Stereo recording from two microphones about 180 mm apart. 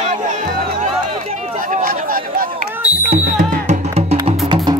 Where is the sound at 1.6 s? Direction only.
50° right (ahead or behind).